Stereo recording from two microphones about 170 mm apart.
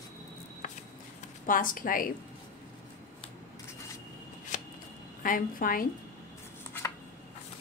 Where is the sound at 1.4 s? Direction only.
55° left (ahead or behind).